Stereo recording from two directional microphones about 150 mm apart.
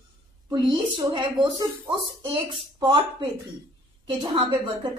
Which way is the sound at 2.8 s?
30° right (ahead or behind).